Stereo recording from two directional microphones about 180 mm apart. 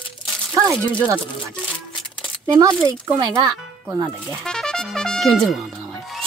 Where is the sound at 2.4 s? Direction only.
15° right (ahead or behind).